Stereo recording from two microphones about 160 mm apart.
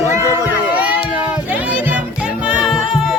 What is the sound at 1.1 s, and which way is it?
Music, 10° right (ahead or behind).